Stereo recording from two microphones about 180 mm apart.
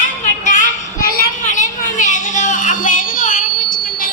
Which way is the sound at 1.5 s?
45° left (ahead or behind).